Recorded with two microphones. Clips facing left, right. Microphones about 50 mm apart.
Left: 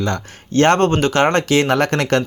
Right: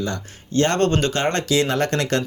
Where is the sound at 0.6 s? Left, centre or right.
Left.